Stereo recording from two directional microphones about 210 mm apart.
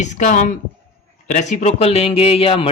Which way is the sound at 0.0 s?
35° left (ahead or behind).